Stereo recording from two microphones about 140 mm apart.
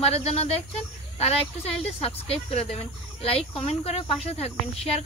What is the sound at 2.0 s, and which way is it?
Speech, 45° left (ahead or behind).